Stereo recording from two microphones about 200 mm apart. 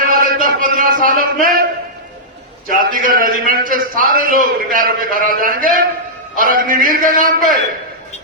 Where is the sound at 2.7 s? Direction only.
45° right (ahead or behind).